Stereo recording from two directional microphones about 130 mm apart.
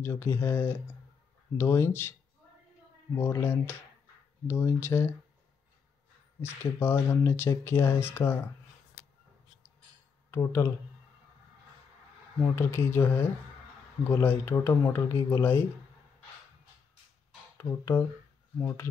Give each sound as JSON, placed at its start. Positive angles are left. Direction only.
{"t": 0.0, "sound": "speech", "side_deg": 20}
{"t": 3.2, "sound": "speech", "side_deg": 20}
{"t": 6.4, "sound": "speech", "side_deg": 20}
{"t": 10.3, "sound": "speech", "side_deg": 20}
{"t": 12.5, "sound": "speech", "side_deg": 15}
{"t": 17.6, "sound": "speech", "side_deg": 20}